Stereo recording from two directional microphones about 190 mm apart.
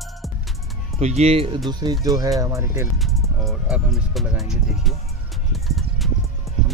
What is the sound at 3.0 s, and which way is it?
Speech, centre (ahead or behind).